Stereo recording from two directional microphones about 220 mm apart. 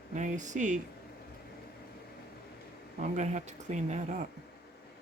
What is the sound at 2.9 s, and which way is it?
Speech, 35° right (ahead or behind).